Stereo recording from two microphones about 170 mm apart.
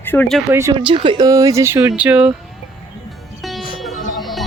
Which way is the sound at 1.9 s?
5° right (ahead or behind).